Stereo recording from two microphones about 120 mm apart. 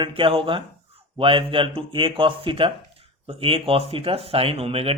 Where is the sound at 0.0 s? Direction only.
45° right (ahead or behind).